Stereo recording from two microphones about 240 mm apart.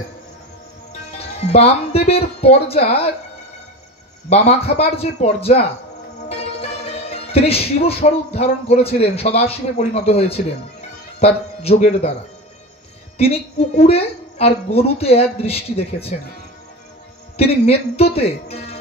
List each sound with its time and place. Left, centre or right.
1.1 s speech: left
4.3 s a woman's voice: left
13.2 s a woman's voice: left
17.4 s a woman's voice: left